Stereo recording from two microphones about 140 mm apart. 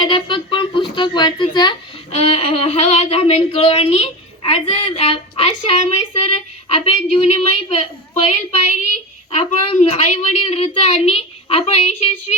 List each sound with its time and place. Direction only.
0.0 s a sound: 35° left (ahead or behind)
2.1 s a woman's voice: 45° left (ahead or behind)
4.9 s a woman's voice: 40° left (ahead or behind)